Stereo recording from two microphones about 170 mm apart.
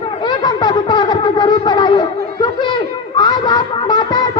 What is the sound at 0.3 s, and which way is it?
Shofar, 25° left (ahead or behind).